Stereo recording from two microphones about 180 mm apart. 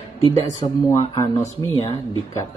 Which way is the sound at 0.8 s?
20° left (ahead or behind).